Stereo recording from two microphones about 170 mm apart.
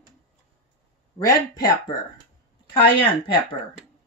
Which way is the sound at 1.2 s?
20° left (ahead or behind).